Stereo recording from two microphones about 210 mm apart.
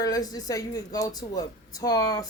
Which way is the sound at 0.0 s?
15° left (ahead or behind).